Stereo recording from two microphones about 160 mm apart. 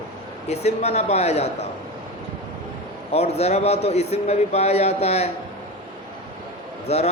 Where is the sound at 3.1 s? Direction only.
40° left (ahead or behind).